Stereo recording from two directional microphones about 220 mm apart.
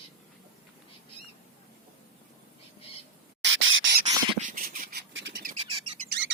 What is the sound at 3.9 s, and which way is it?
Bird, 35° right (ahead or behind).